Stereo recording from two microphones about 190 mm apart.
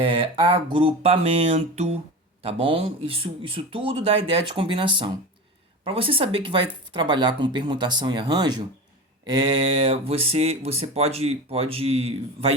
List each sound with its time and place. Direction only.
0.2 s speech: 25° right (ahead or behind)
9.8 s speech: 30° right (ahead or behind)